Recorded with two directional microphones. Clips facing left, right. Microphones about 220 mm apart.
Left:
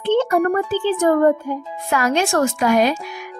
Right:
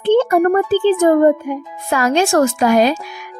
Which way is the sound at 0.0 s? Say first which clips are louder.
Right 4 dB; 35° right (ahead or behind).